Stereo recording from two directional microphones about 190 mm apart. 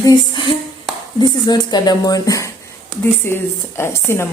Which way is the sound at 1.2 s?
20° left (ahead or behind).